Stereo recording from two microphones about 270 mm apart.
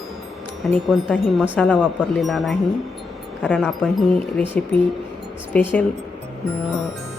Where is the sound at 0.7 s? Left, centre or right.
Centre.